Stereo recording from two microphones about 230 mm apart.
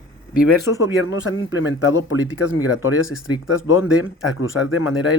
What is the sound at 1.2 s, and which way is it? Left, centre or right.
Speech, left.